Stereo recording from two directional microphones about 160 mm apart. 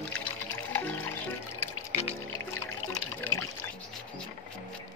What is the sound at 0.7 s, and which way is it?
Music, 10° left (ahead or behind).